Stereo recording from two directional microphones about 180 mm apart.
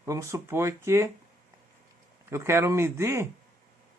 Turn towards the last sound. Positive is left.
turn(degrees=-15)  # may be behind; listen again after turning